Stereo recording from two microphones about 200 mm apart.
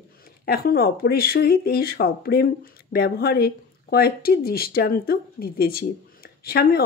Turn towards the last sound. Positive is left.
turn(degrees=50)  # may be behind; listen again after turning